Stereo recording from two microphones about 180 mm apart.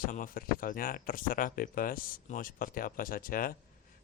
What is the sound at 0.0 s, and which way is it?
Speech, 50° left (ahead or behind).